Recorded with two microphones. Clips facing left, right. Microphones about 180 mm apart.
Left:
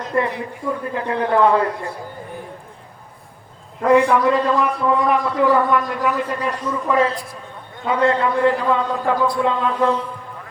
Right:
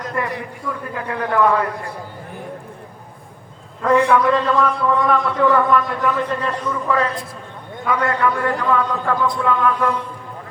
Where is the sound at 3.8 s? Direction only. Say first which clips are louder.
Left 1 dB; 15° left (ahead or behind).